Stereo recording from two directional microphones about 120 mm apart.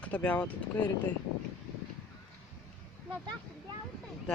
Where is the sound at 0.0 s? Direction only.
10° left (ahead or behind).